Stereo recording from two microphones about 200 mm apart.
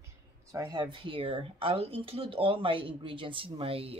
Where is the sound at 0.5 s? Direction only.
20° right (ahead or behind).